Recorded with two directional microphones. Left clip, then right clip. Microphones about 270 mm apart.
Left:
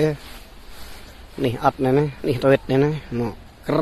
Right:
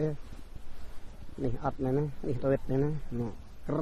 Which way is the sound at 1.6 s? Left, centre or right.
Centre.